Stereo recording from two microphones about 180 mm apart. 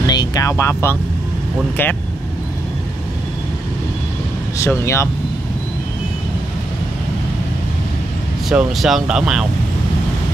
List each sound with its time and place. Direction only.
0.0 s vehicle: 20° left (ahead or behind)
4.6 s speech: 15° left (ahead or behind)
8.5 s speech: centre (ahead or behind)